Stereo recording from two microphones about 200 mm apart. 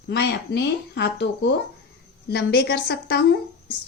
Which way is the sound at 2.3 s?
55° left (ahead or behind).